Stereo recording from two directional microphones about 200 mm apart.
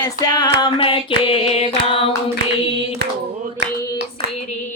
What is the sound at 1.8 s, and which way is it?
Hands, 30° left (ahead or behind).